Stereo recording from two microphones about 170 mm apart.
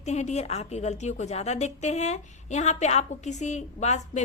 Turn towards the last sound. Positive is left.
turn(degrees=40)  # may be behind; listen again after turning